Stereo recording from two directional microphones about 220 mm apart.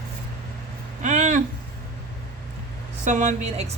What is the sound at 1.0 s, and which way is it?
Speech, 35° right (ahead or behind).